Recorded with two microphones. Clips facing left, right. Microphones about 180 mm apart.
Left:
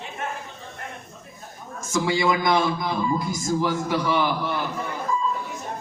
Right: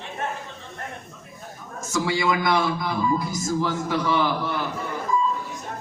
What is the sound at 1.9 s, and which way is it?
A man's voice, 20° left (ahead or behind).